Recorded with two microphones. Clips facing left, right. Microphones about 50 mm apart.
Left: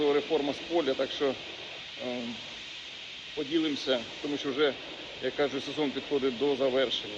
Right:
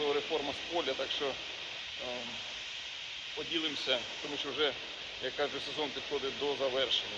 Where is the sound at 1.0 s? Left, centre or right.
Centre.